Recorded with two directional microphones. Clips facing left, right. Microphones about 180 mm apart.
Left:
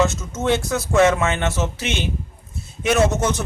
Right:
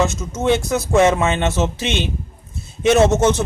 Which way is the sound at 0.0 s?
15° right (ahead or behind).